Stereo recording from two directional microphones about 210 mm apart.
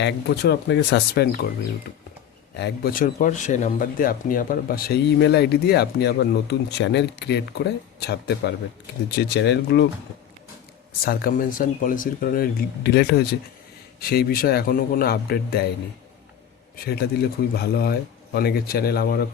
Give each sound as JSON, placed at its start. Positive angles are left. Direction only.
{"t": 0.0, "sound": "speech", "side_deg": 50}
{"t": 2.6, "sound": "speech", "side_deg": 50}
{"t": 11.0, "sound": "speech", "side_deg": 45}
{"t": 16.7, "sound": "speech", "side_deg": 50}